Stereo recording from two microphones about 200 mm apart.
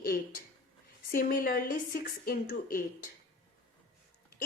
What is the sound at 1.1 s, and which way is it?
A woman's voice, 45° left (ahead or behind).